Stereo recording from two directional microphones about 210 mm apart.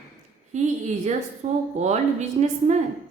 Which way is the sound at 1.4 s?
35° right (ahead or behind).